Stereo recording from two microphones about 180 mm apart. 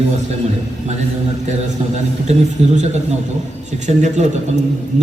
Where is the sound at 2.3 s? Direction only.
40° right (ahead or behind).